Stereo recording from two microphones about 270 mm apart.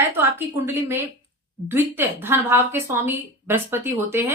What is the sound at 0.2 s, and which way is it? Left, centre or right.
Speech, centre.